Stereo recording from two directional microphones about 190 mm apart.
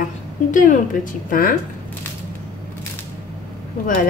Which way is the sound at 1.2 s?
45° left (ahead or behind).